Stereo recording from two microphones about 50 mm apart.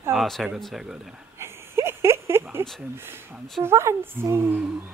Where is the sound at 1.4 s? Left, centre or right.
Right.